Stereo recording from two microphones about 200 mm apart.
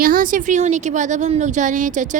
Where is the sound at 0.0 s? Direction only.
45° right (ahead or behind).